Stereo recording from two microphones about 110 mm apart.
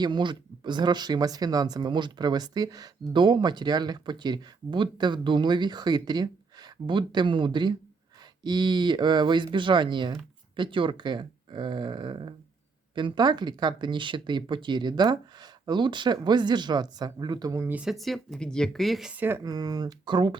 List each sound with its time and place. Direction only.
0.0 s speech: 45° right (ahead or behind)
17.6 s speech: 15° right (ahead or behind)
17.8 s speech: centre (ahead or behind)
19.1 s speech: 20° right (ahead or behind)
19.4 s speech: 35° right (ahead or behind)